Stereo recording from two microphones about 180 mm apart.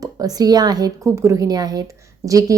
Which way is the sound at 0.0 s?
20° right (ahead or behind).